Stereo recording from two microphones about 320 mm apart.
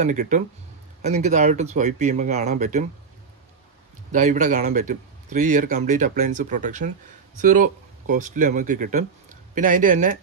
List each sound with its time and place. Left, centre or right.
0.0 s a man's voice: right
4.1 s a man's voice: right